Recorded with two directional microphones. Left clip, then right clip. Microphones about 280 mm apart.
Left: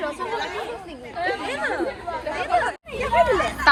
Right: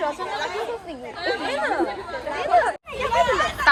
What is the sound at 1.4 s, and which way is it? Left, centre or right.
Speech, right.